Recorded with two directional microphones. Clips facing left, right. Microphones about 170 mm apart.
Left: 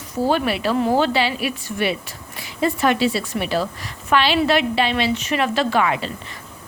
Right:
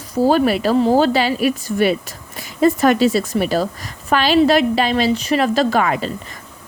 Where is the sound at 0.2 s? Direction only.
40° right (ahead or behind).